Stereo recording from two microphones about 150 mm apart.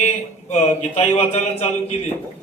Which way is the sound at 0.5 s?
45° left (ahead or behind).